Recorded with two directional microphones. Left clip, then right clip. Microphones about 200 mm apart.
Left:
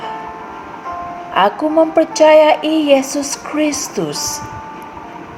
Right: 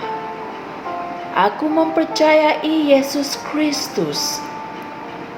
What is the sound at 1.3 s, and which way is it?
A woman's voice, 40° left (ahead or behind).